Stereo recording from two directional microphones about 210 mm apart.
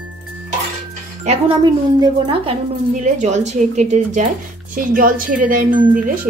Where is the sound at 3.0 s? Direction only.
35° right (ahead or behind).